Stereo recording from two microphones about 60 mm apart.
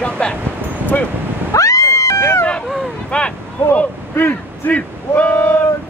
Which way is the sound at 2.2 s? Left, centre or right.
Left.